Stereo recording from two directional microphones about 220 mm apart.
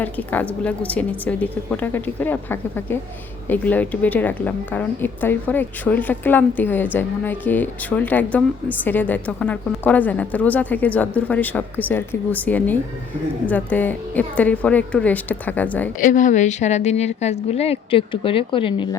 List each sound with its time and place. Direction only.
0.0 s a woman's voice: 5° left (ahead or behind)
16.0 s a woman's voice: 35° left (ahead or behind)